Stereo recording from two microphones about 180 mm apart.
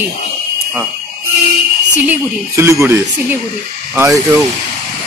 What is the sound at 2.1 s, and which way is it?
Speech, 15° right (ahead or behind).